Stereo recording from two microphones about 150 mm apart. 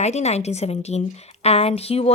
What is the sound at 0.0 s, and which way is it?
Speech, 45° left (ahead or behind).